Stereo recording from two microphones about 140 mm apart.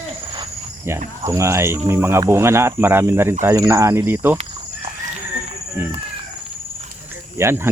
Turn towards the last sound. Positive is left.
turn(degrees=-15)  # may be behind; listen again after turning